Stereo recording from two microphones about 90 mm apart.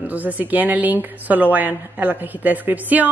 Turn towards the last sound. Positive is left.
turn(degrees=-20)  # may be behind; listen again after turning